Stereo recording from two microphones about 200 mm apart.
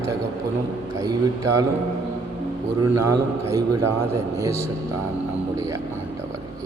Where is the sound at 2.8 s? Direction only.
15° right (ahead or behind).